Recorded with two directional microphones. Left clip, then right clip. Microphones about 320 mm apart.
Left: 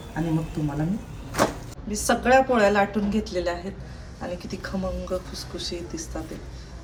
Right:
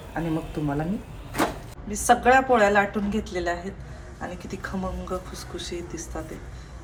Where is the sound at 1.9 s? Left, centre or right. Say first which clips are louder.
Right 1 dB; centre.